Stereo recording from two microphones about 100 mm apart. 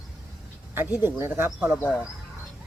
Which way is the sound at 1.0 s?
25° right (ahead or behind).